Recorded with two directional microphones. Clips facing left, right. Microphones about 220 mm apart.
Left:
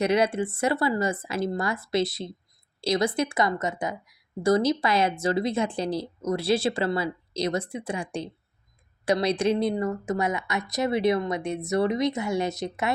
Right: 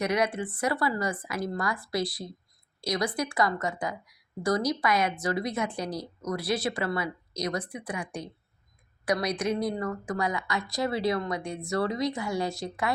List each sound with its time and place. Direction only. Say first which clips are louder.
0.0 s a woman's voice: left 4 dB; 30° left (ahead or behind)